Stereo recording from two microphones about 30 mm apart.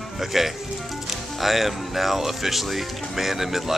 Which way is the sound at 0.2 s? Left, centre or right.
Centre.